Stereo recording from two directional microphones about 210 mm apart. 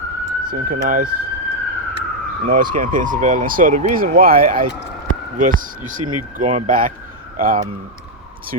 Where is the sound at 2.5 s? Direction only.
40° right (ahead or behind).